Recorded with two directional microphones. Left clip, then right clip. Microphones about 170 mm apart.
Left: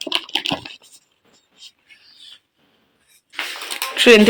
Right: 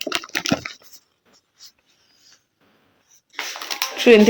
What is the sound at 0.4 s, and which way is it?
Computer keyboard, 20° right (ahead or behind).